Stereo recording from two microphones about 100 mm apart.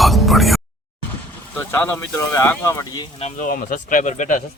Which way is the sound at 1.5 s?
20° left (ahead or behind).